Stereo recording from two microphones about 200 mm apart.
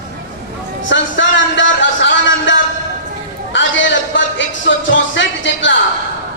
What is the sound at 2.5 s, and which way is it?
Train, 65° left (ahead or behind).